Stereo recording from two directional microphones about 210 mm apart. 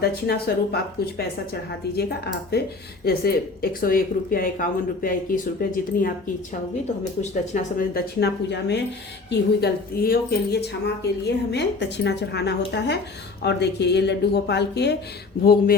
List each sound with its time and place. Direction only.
0.0 s a woman's voice: 50° left (ahead or behind)
2.0 s a woman's voice: 50° left (ahead or behind)
7.2 s a woman's voice: 35° left (ahead or behind); by 14.9 s 55° left (ahead or behind)